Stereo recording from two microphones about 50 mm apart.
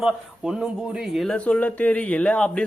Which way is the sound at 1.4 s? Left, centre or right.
Left.